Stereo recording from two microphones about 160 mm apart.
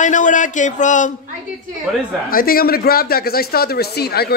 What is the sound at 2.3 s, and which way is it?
Speech, 65° left (ahead or behind).